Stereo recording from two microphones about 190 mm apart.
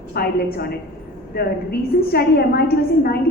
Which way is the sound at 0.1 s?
55° left (ahead or behind).